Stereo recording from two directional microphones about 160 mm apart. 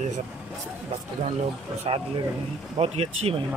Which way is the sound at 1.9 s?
35° right (ahead or behind).